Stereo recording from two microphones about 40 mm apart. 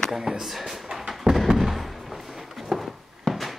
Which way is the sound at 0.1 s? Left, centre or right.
Centre.